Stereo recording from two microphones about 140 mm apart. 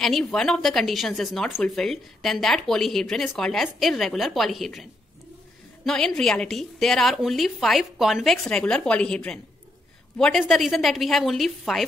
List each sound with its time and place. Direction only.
0.0 s speech: 5° left (ahead or behind)
5.9 s speech: 5° left (ahead or behind)